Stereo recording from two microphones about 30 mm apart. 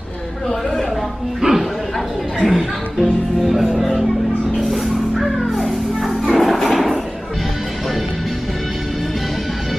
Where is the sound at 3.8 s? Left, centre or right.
Centre.